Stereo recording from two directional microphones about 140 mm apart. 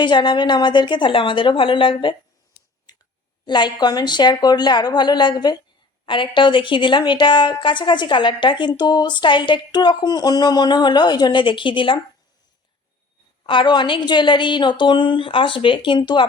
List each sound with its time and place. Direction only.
0.0 s a woman's voice: 35° left (ahead or behind)
3.4 s a woman's voice: 30° left (ahead or behind)
13.4 s a woman's voice: 35° left (ahead or behind)